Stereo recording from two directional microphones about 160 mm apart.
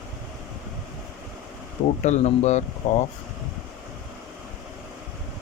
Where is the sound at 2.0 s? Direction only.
45° left (ahead or behind).